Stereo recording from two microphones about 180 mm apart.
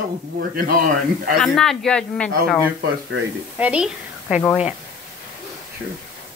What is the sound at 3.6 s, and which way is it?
A woman's voice, 5° right (ahead or behind).